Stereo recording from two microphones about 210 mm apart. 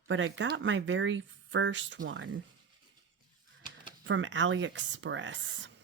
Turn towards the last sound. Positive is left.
turn(degrees=-60)  # may be behind; listen again after turning